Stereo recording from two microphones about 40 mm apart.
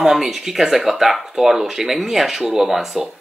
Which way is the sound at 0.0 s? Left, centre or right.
Centre.